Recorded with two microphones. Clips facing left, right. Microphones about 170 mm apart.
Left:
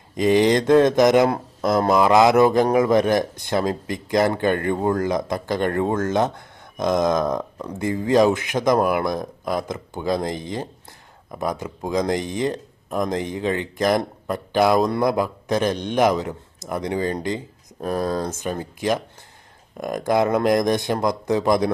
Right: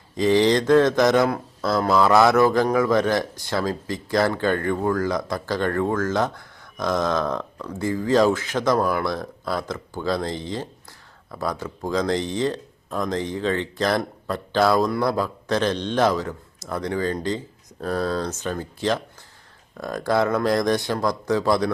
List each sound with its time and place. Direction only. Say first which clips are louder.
0.2 s a man's voice: left 1 dB; 20° left (ahead or behind)